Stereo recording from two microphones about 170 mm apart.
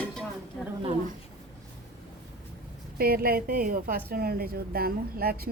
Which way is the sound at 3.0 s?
60° right (ahead or behind).